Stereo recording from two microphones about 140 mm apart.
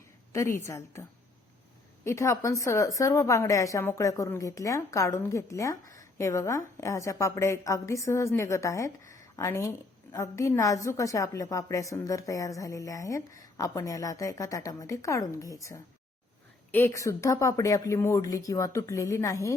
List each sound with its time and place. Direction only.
0.3 s speech: 20° left (ahead or behind)
2.0 s speech: 20° left (ahead or behind)